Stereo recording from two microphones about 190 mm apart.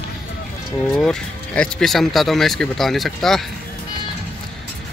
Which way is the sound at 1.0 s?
5° left (ahead or behind).